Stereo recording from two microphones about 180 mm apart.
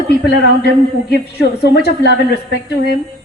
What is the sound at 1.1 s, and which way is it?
A woman's voice, 65° left (ahead or behind).